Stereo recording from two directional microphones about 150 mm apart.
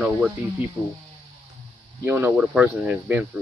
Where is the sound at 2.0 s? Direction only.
15° right (ahead or behind).